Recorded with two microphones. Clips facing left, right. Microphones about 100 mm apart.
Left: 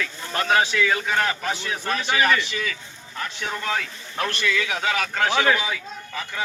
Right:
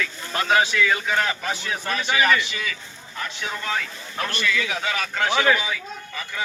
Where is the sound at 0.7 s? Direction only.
45° left (ahead or behind).